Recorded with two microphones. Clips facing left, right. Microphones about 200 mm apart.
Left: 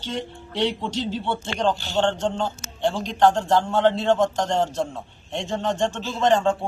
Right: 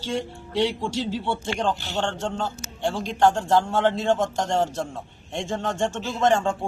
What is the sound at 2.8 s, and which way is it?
Speech, 10° right (ahead or behind).